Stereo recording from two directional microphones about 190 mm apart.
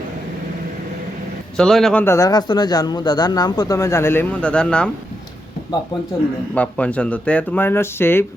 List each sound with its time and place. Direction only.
1.5 s a man's voice: centre (ahead or behind)
6.5 s a man's voice: 5° left (ahead or behind)